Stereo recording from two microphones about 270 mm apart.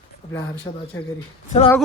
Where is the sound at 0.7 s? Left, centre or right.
Centre.